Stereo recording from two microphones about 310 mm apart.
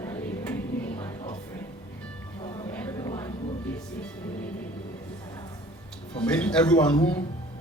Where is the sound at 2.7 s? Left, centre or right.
Centre.